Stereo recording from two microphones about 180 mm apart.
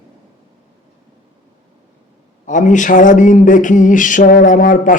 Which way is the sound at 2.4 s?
45° left (ahead or behind).